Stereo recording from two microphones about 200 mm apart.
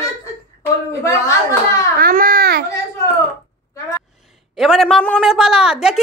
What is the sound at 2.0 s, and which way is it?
Baby cry, 45° right (ahead or behind).